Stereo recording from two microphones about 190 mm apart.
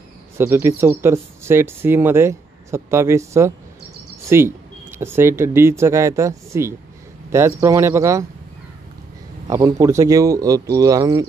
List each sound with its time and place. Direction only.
0.4 s speech: 10° right (ahead or behind)
9.5 s speech: 20° right (ahead or behind)